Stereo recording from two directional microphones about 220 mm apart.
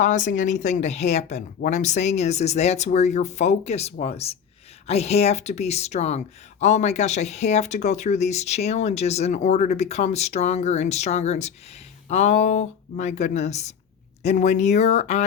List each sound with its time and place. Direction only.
0.0 s speech: 35° left (ahead or behind)